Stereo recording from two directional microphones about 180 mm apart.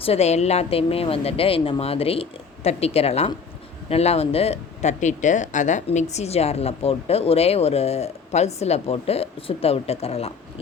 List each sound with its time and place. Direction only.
0.0 s speech: 35° left (ahead or behind)